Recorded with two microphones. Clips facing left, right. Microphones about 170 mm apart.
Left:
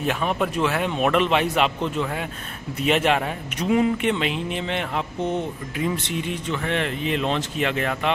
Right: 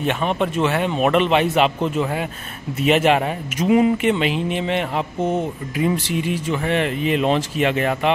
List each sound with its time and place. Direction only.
0.0 s a man's voice: centre (ahead or behind)